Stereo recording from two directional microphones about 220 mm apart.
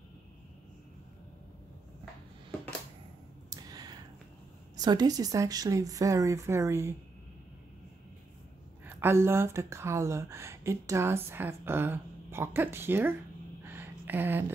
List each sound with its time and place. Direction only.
3.4 s clicking: 15° right (ahead or behind)
4.7 s speech: 20° right (ahead or behind)
8.8 s speech: 10° right (ahead or behind)
13.7 s a sound: 10° right (ahead or behind)